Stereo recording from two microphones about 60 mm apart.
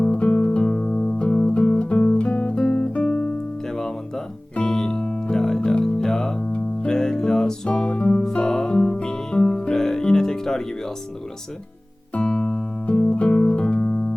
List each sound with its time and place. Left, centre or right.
0.0 s music: left
2.1 s guitar: left
4.5 s music: centre
12.1 s music: left